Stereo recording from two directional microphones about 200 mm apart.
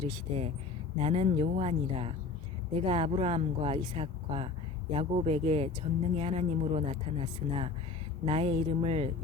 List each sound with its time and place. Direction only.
0.1 s speech: 30° right (ahead or behind)